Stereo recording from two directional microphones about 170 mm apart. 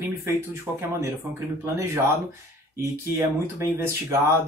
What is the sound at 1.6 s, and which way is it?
Speech, 15° right (ahead or behind).